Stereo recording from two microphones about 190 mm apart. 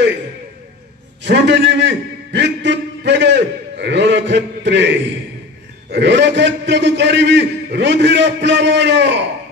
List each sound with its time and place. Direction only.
1.2 s a man's voice: 70° right (ahead or behind)